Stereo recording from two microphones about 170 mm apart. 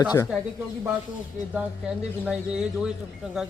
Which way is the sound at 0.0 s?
25° left (ahead or behind).